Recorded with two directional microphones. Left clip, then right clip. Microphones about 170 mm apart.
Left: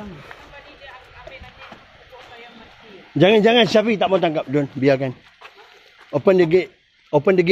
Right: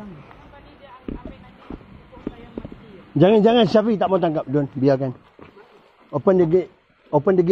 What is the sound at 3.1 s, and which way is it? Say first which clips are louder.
A man's voice: left 1 dB; 25° right (ahead or behind).